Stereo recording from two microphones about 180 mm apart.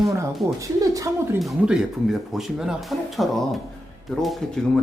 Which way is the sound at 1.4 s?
Centre (ahead or behind).